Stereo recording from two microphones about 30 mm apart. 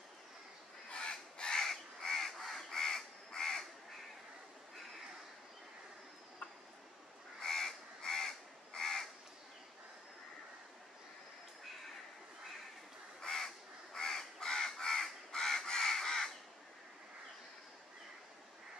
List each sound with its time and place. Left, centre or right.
0.8 s a sound: left
1.1 s crow: left
7.4 s crow: centre
13.2 s crow: centre